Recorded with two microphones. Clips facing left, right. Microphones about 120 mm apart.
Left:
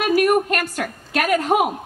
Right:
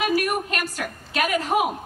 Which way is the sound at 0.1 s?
50° left (ahead or behind).